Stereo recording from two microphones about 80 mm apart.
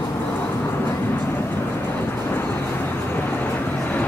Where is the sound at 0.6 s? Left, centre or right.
Left.